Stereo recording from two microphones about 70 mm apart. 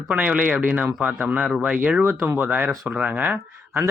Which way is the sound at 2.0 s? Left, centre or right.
Right.